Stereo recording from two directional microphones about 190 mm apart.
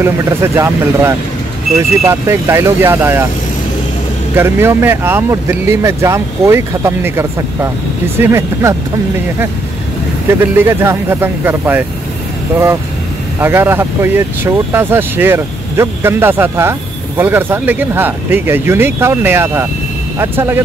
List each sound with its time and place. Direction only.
0.0 s speech: 15° right (ahead or behind)
4.4 s speech: 10° right (ahead or behind)
10.4 s speech: 10° right (ahead or behind)
13.4 s speech: 10° right (ahead or behind)